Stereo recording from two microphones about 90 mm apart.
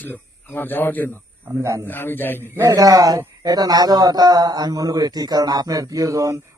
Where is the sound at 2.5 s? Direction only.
40° right (ahead or behind).